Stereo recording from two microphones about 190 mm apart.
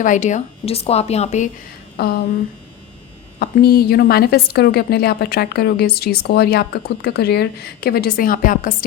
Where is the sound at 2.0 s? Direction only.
55° left (ahead or behind).